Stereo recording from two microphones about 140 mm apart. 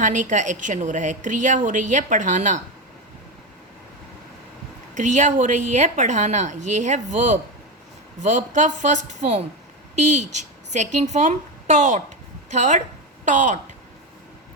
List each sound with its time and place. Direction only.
0.0 s a woman's voice: 65° right (ahead or behind)
4.9 s a woman's voice: 60° right (ahead or behind)